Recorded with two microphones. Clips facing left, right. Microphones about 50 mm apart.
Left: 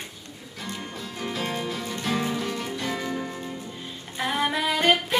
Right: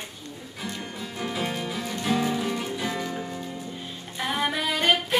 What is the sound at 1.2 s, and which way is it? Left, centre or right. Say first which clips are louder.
Music: even; centre.